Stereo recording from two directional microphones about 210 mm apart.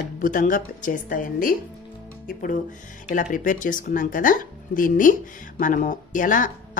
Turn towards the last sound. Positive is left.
turn(degrees=40)  # may be behind; listen again after turning